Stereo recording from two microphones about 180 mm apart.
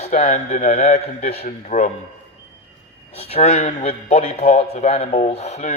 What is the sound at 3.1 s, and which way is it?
A man's voice, 35° left (ahead or behind).